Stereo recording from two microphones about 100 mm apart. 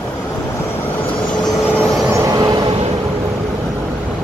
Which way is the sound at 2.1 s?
40° right (ahead or behind).